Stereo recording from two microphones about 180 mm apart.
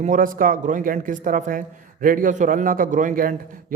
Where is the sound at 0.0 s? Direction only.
45° right (ahead or behind).